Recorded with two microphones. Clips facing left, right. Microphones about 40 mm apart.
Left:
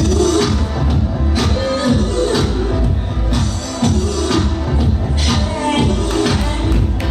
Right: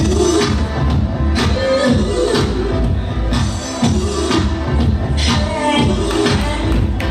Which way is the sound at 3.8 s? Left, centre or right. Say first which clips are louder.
Even; centre.